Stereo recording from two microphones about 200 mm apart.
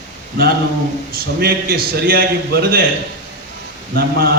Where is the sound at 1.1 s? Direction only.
50° right (ahead or behind).